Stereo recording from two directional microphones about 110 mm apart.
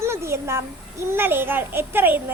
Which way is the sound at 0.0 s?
25° right (ahead or behind).